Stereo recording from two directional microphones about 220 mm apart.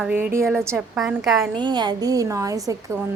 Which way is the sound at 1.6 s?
20° right (ahead or behind).